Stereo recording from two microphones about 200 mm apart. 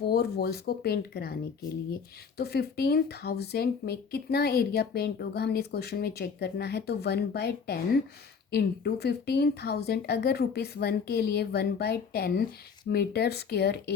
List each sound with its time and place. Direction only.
0.0 s speech: 50° left (ahead or behind)